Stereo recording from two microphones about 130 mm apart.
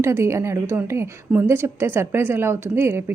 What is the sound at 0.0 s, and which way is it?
A woman's voice, 20° right (ahead or behind).